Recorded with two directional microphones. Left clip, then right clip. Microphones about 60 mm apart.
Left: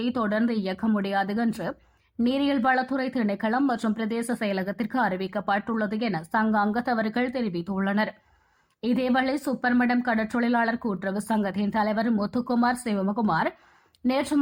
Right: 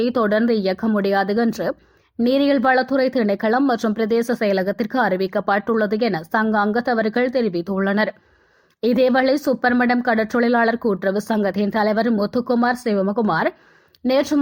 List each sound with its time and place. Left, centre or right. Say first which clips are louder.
0.0 s speech: right 8 dB; right
3.7 s speech: right 7 dB; right
3.9 s speech: right 10 dB; right
14.1 s speech: right 8 dB; right